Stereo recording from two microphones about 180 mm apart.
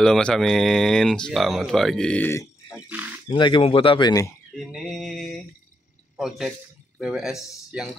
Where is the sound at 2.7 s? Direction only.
10° right (ahead or behind).